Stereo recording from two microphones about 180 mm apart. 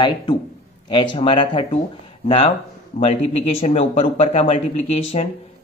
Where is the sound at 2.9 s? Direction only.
35° left (ahead or behind).